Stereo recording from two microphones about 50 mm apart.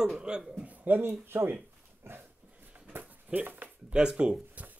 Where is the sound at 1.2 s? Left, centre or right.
Right.